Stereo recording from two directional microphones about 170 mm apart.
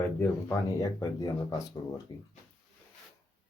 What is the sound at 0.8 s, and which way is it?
Speech, 20° left (ahead or behind).